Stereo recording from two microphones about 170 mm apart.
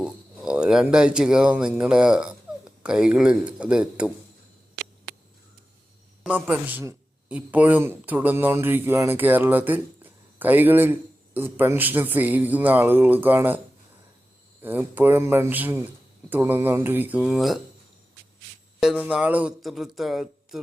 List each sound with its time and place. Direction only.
0.0 s speech: 5° right (ahead or behind)
6.2 s a man's voice: 10° right (ahead or behind)
14.6 s a man's voice: 10° right (ahead or behind)
18.8 s speech: 5° right (ahead or behind)